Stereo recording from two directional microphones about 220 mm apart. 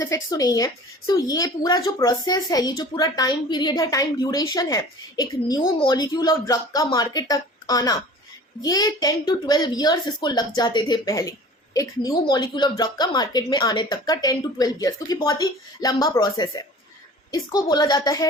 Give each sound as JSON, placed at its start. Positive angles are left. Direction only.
{"t": 0.0, "sound": "a woman's voice", "side_deg": 15}